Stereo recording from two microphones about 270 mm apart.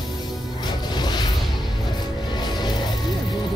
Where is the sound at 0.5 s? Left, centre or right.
Centre.